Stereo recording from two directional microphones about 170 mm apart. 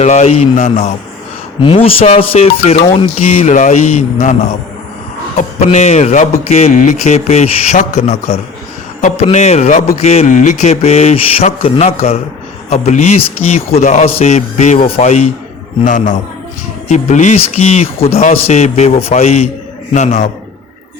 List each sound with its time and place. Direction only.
0.0 s a man's voice: 40° left (ahead or behind)
5.4 s a man's voice: 40° left (ahead or behind)